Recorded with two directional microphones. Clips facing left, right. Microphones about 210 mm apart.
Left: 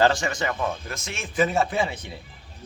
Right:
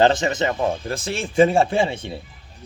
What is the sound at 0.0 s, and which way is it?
A man's voice, 20° right (ahead or behind).